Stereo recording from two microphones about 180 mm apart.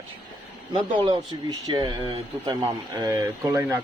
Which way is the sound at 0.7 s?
25° right (ahead or behind).